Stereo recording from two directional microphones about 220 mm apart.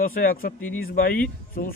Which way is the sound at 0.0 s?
40° left (ahead or behind).